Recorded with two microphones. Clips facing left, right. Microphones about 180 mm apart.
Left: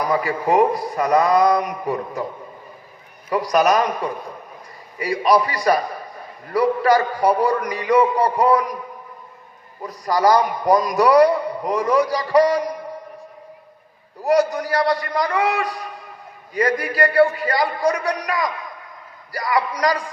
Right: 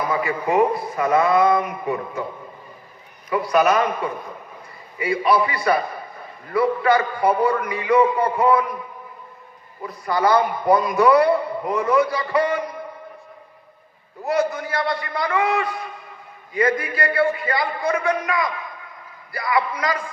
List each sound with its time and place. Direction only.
0.0 s a man's voice: 40° left (ahead or behind)
3.2 s a man's voice: 40° left (ahead or behind)
9.8 s a man's voice: 40° left (ahead or behind)
14.3 s a man's voice: 40° left (ahead or behind)